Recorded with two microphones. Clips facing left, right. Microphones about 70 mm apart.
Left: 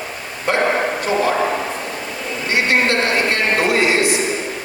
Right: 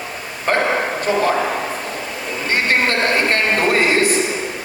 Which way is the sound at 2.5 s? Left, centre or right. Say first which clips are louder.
Left 1 dB; right.